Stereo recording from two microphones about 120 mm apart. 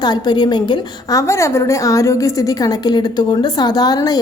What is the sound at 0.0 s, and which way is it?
A woman's voice, 35° left (ahead or behind).